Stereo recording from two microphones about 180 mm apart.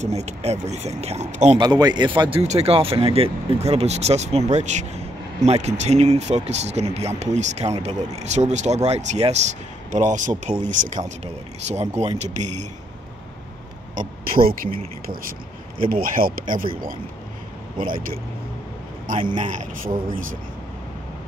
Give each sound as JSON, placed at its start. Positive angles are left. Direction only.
{"t": 0.0, "sound": "speech", "side_deg": -40}
{"t": 1.6, "sound": "speech", "side_deg": -25}
{"t": 13.9, "sound": "speech", "side_deg": -55}
{"t": 17.7, "sound": "speech", "side_deg": -50}
{"t": 19.3, "sound": "speech", "side_deg": -45}